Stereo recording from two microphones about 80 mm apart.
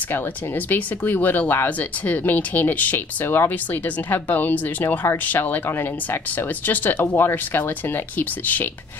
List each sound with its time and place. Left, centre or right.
0.7 s speech: left